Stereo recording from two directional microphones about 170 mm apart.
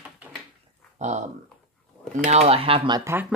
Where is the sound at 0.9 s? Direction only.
45° right (ahead or behind).